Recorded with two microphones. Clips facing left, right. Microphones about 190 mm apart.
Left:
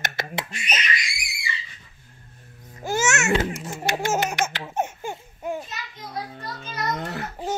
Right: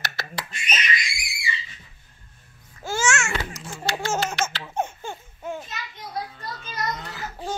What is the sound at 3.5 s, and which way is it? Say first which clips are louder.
Baby laughter: left 4 dB; 20° left (ahead or behind).